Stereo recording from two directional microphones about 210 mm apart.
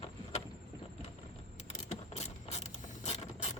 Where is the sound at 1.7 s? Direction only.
30° left (ahead or behind).